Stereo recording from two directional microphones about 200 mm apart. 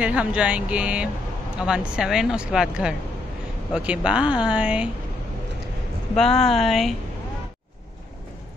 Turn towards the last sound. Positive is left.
turn(degrees=0)  # may be behind; listen again after turning